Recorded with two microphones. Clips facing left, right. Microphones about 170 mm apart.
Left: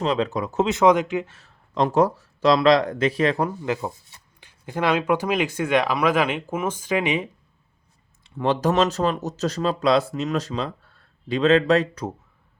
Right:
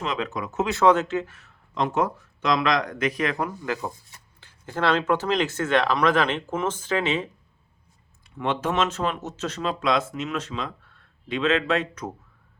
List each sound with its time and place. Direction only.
0.0 s speech: 35° left (ahead or behind)
0.7 s speech: 15° left (ahead or behind)
1.3 s speech: 30° left (ahead or behind); by 7.3 s 15° left (ahead or behind)
8.2 s speech: 35° left (ahead or behind)